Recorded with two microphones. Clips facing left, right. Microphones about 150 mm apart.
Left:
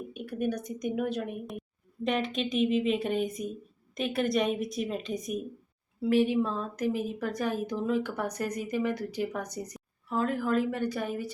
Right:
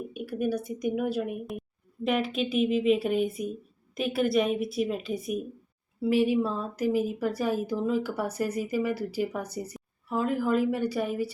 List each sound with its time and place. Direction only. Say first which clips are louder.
0.1 s a woman's voice: right 2 dB; 5° right (ahead or behind)